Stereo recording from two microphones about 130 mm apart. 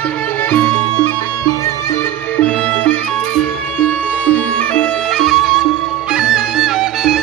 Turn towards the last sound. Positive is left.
turn(degrees=-5)  # may be behind; listen again after turning